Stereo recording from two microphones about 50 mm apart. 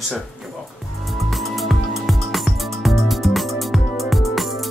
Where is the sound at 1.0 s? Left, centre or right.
Centre.